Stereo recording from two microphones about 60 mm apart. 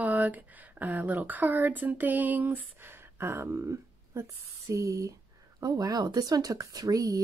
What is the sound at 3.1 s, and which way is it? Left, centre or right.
Speech, right.